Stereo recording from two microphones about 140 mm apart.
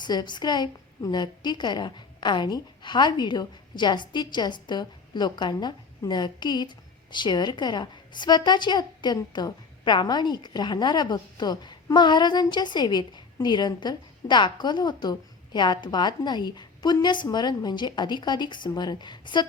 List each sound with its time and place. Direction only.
0.0 s a woman's voice: 30° left (ahead or behind)